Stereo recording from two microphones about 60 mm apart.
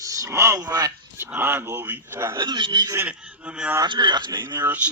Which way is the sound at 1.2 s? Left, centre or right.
Right.